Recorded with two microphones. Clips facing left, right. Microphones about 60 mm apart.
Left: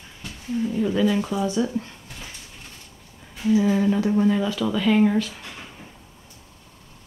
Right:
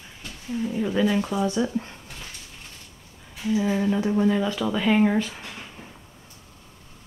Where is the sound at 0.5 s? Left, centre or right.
Centre.